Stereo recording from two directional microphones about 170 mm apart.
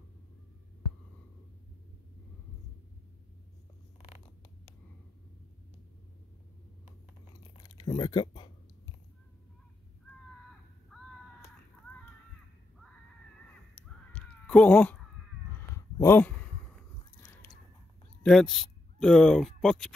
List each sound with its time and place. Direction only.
7.6 s a sound: 25° left (ahead or behind)
10.9 s crow: centre (ahead or behind)
14.1 s cat: 10° left (ahead or behind)
16.0 s speech: 10° left (ahead or behind)
17.2 s chewing: 10° left (ahead or behind)
18.2 s speech: centre (ahead or behind)